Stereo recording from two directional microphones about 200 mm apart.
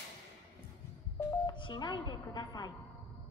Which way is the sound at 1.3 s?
20° left (ahead or behind).